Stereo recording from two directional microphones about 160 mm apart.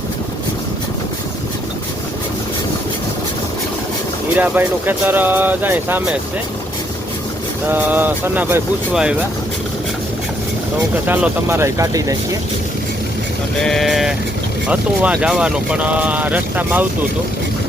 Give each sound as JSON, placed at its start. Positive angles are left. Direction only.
{"t": 4.4, "sound": "speech", "side_deg": -10}
{"t": 7.7, "sound": "speech", "side_deg": -10}
{"t": 11.0, "sound": "speech", "side_deg": -10}
{"t": 13.6, "sound": "speech", "side_deg": 0}